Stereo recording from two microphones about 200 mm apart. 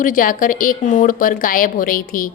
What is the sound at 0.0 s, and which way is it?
A woman's voice, 45° left (ahead or behind).